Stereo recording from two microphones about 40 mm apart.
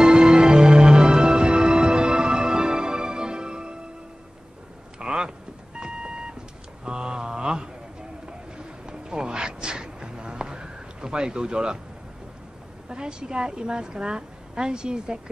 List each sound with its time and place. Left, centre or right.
0.0 s music: centre
4.9 s vehicle: right
5.8 s alarm clock: right
6.8 s a sound: right
12.8 s a woman's voice: right